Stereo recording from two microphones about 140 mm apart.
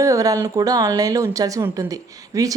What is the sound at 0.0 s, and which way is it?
Speech, 25° right (ahead or behind).